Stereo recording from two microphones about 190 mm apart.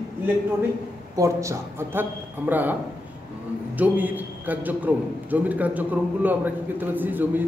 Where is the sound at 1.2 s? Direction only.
15° right (ahead or behind).